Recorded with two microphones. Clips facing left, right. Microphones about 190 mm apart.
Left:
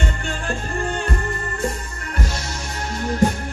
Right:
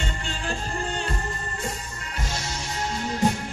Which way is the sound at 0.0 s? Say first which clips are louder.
Left 5 dB; 55° left (ahead or behind).